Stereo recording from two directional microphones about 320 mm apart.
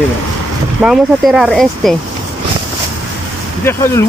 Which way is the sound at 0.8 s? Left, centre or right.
Centre.